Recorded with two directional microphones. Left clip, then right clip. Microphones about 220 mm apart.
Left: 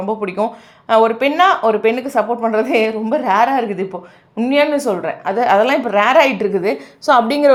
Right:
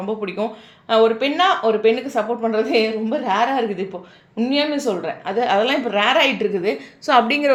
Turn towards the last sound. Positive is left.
turn(degrees=20)  # may be behind; listen again after turning